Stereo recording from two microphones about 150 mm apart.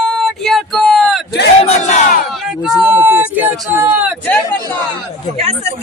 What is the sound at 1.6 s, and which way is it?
Battle cry, 45° left (ahead or behind).